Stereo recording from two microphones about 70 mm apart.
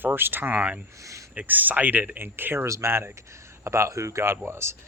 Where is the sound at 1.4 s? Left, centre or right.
Right.